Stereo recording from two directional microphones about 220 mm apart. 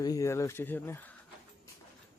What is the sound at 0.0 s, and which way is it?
Speech, 15° left (ahead or behind).